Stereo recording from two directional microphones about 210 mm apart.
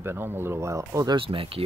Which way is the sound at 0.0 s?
10° right (ahead or behind).